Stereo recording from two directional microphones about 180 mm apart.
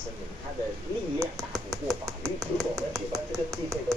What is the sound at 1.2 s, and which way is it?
Speech, 20° right (ahead or behind).